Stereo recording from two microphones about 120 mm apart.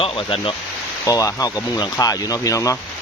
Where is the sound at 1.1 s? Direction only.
30° left (ahead or behind).